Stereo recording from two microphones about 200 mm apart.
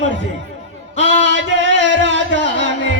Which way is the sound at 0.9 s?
65° right (ahead or behind).